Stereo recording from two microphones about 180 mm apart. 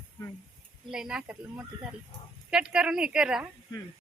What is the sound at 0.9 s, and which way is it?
Speech, 5° right (ahead or behind).